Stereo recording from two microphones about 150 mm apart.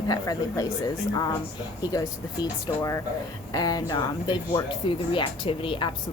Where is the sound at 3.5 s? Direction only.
25° left (ahead or behind).